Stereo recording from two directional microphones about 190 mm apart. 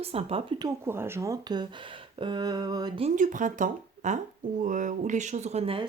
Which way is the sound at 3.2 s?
40° right (ahead or behind).